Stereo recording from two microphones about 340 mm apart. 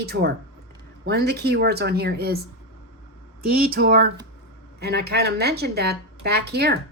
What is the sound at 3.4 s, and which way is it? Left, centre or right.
Speech, right.